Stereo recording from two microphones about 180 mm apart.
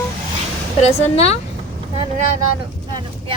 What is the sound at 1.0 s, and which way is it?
Speech, 35° left (ahead or behind).